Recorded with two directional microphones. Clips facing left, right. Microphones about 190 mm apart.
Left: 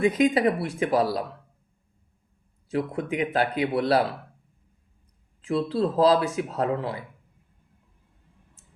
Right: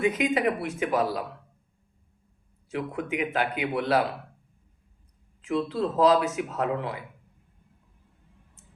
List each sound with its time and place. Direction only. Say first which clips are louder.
0.0 s speech: left 4 dB; 35° left (ahead or behind)
2.6 s speech: left 3 dB; 35° left (ahead or behind)
5.4 s speech: left 2 dB; 30° left (ahead or behind)